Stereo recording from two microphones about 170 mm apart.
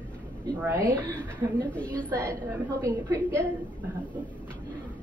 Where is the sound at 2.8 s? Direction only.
20° right (ahead or behind).